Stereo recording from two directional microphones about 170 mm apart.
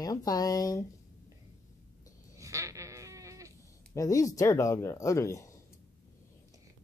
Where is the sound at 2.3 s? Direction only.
20° right (ahead or behind).